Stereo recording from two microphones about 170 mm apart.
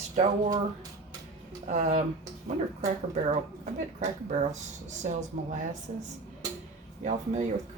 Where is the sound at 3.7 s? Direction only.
45° right (ahead or behind).